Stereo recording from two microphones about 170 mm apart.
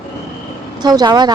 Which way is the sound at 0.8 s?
25° right (ahead or behind).